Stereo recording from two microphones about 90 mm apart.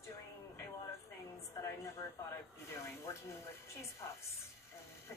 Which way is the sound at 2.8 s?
30° left (ahead or behind).